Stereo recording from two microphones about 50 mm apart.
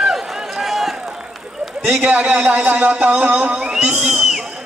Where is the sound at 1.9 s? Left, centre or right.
Right.